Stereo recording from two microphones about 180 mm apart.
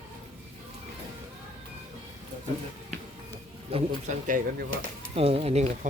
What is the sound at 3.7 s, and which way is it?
Speech, 40° right (ahead or behind).